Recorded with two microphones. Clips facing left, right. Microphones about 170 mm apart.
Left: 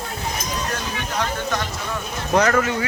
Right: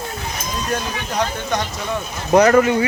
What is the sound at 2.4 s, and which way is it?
Speech, 20° right (ahead or behind).